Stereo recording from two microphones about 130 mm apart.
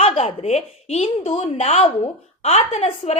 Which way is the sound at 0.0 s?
50° left (ahead or behind).